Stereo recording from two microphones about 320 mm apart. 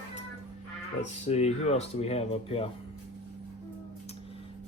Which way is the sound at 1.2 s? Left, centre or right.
Centre.